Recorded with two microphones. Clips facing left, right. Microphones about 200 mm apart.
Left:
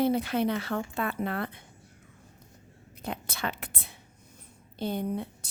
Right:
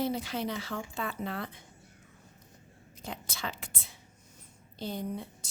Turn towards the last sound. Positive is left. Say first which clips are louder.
# left 5 dB
turn(degrees=60)  # may be behind; listen again after turning